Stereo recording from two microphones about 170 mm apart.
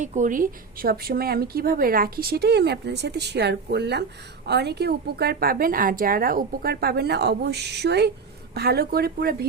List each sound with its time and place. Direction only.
0.0 s a woman's voice: 45° right (ahead or behind); by 9.5 s 65° right (ahead or behind)